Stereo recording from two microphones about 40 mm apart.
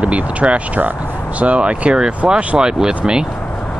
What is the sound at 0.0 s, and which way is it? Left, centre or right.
Speech, right.